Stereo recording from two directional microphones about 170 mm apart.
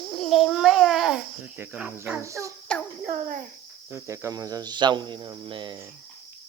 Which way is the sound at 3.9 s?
15° right (ahead or behind).